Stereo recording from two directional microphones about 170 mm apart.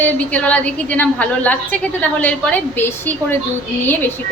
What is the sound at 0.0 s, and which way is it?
A woman's voice, 10° left (ahead or behind).